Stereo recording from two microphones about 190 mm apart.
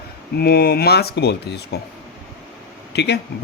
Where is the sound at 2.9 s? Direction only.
60° left (ahead or behind).